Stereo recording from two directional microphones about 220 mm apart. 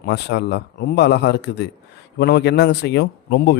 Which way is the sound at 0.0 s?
50° left (ahead or behind).